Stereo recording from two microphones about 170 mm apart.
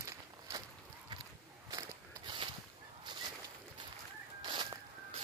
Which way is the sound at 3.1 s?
25° right (ahead or behind).